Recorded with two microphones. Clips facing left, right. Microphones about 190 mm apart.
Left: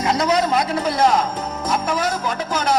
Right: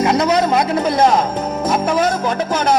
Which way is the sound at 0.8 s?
25° right (ahead or behind).